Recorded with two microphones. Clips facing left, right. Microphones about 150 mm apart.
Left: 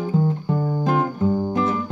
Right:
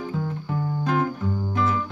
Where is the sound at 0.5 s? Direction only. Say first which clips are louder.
Left 1 dB; 40° left (ahead or behind).